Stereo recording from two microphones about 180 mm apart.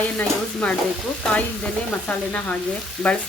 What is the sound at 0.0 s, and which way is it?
Sizzle, 10° left (ahead or behind).